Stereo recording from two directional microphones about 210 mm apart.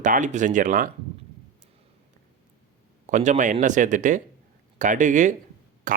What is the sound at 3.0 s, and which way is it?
Speech, 35° right (ahead or behind).